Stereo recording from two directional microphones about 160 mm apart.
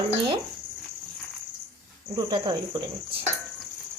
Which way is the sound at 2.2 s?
30° right (ahead or behind).